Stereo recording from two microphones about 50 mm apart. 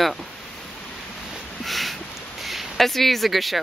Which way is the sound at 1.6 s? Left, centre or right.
Centre.